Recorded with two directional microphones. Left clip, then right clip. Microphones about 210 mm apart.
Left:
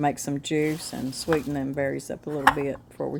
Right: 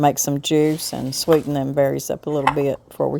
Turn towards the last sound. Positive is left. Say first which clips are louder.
# right 9 dB
turn(degrees=-35)  # may be behind; listen again after turning